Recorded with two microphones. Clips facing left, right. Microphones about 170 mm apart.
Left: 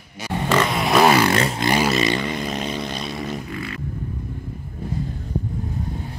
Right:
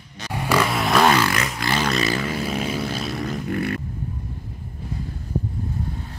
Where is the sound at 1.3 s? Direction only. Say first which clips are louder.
Left 5 dB; 30° left (ahead or behind).